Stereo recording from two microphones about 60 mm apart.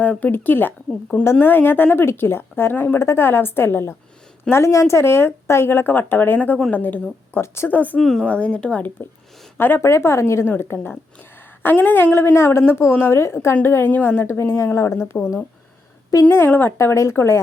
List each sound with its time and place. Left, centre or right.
0.0 s a woman's voice: left
4.4 s a woman's voice: left
7.4 s a woman's voice: left
7.7 s a woman's voice: left
7.9 s speech: centre
8.2 s a woman's voice: centre
9.6 s a woman's voice: left
10.6 s a woman's voice: left
14.2 s a woman's voice: left
16.1 s speech: left
16.5 s a woman's voice: left
16.7 s a woman's voice: left